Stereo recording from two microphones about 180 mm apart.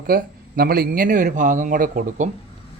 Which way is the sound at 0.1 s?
55° right (ahead or behind).